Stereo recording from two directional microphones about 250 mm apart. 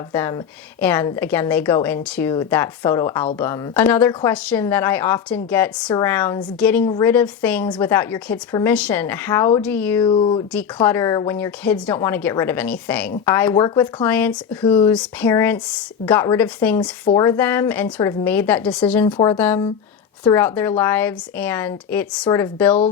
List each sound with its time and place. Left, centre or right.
0.1 s a woman's voice: centre
10.0 s speech: left
10.5 s a woman's voice: centre
14.6 s speech: centre
14.9 s a woman's voice: centre
19.0 s speech: centre
19.4 s a woman's voice: centre